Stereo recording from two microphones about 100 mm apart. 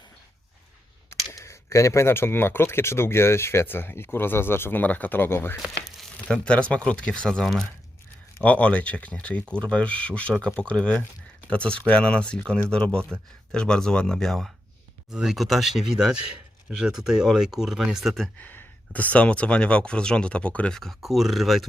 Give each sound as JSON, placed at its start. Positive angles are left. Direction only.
{"t": 1.3, "sound": "speech", "side_deg": 30}
{"t": 5.6, "sound": "crumpling", "side_deg": -5}
{"t": 6.1, "sound": "speech", "side_deg": 10}
{"t": 18.3, "sound": "speech", "side_deg": 15}